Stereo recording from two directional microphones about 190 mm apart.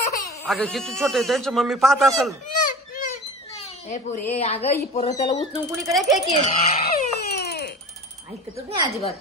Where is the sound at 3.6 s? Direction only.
40° left (ahead or behind).